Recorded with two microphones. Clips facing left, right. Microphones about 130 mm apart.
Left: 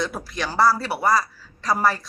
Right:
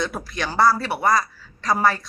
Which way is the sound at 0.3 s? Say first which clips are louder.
Right 1 dB; 5° left (ahead or behind).